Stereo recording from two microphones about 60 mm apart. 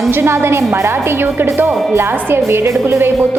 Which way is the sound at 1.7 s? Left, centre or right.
Centre.